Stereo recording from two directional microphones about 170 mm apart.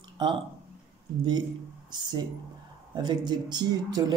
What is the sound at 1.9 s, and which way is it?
Speech, 25° right (ahead or behind).